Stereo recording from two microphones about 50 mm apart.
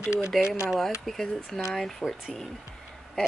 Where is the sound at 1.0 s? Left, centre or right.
Centre.